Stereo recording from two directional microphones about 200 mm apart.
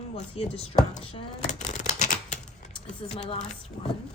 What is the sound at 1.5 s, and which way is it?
Shuffling cards, 35° left (ahead or behind).